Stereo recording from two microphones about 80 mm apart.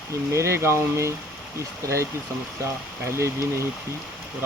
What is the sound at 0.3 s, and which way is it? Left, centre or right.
Speech, right.